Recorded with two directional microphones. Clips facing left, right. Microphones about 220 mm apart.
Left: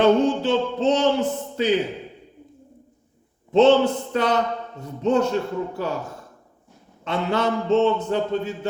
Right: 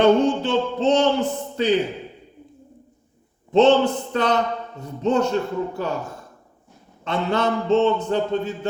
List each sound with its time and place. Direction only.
0.0 s a man's voice: 5° left (ahead or behind)
3.5 s a man's voice: 10° left (ahead or behind)
7.0 s a man's voice: 10° left (ahead or behind)